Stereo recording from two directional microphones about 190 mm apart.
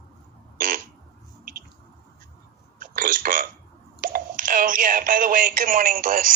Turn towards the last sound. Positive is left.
turn(degrees=-45)  # may be behind; listen again after turning